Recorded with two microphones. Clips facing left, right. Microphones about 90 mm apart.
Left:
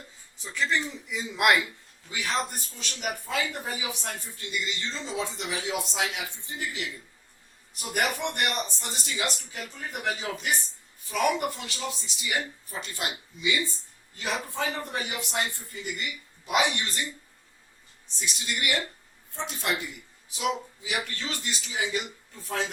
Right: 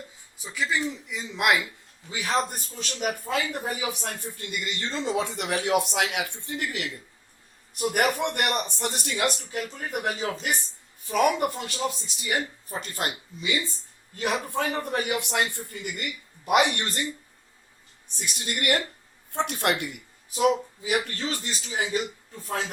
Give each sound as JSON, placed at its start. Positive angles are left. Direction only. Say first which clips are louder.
{"t": 0.3, "sound": "a man's voice", "louder": "even", "side_deg": -5}
{"t": 2.0, "sound": "a man's voice", "louder": "right 1 dB", "side_deg": -30}
{"t": 2.7, "sound": "speech", "louder": "right 5 dB", "side_deg": -40}
{"t": 7.8, "sound": "speech", "louder": "right 5 dB", "side_deg": -50}
{"t": 14.2, "sound": "speech", "louder": "right 4 dB", "side_deg": -55}
{"t": 18.3, "sound": "speech", "louder": "right 4 dB", "side_deg": -50}
{"t": 19.3, "sound": "speech", "louder": "right 5 dB", "side_deg": -60}